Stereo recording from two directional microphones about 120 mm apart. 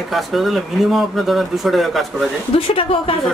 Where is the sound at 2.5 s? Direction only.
50° left (ahead or behind).